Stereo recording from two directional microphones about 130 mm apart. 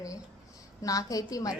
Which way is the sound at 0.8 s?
25° left (ahead or behind).